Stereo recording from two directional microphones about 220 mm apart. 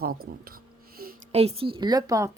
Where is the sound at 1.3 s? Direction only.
25° right (ahead or behind).